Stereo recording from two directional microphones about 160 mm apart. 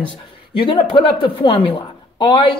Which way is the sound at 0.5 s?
35° left (ahead or behind).